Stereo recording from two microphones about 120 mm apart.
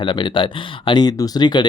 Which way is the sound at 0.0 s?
45° left (ahead or behind).